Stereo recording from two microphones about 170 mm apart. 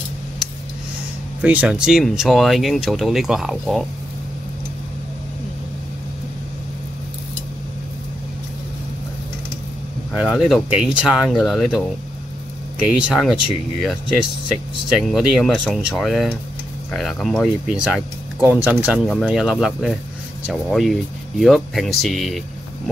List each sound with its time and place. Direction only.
1.4 s speech: 10° right (ahead or behind)
10.1 s speech: 5° right (ahead or behind)
14.9 s speech: centre (ahead or behind)